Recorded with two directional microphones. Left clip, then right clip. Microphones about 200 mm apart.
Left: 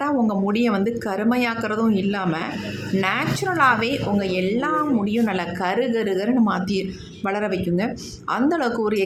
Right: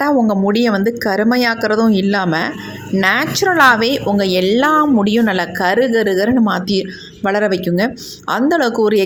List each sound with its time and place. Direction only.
0.0 s a woman's voice: 25° right (ahead or behind)